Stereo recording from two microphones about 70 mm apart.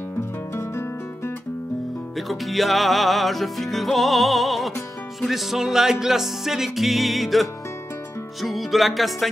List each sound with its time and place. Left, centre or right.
0.6 s music: left
2.1 s music: centre